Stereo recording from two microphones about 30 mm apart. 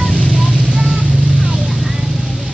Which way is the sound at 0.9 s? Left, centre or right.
Right.